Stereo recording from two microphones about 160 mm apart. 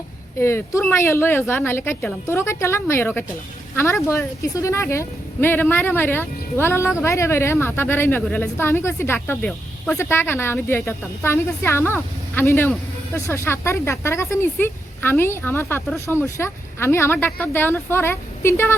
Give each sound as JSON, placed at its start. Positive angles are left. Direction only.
{"t": 0.3, "sound": "speech", "side_deg": 15}